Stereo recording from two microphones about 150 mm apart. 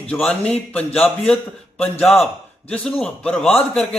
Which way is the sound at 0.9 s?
40° left (ahead or behind).